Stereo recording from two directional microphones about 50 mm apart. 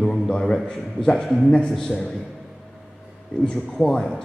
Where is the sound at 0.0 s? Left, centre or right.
Centre.